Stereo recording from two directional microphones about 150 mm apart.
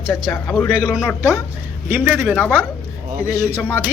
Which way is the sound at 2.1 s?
Centre (ahead or behind).